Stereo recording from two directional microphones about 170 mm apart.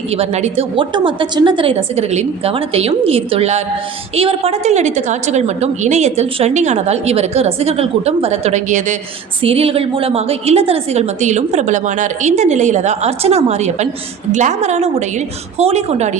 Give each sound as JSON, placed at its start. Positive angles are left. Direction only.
{"t": 0.1, "sound": "a woman's voice", "side_deg": -40}
{"t": 0.9, "sound": "a woman's voice", "side_deg": -30}
{"t": 9.4, "sound": "a woman's voice", "side_deg": -35}